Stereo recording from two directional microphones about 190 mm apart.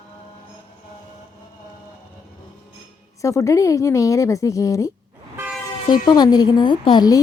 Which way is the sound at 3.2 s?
15° left (ahead or behind).